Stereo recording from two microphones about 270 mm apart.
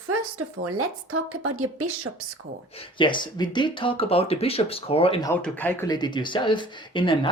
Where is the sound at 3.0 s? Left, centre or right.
Centre.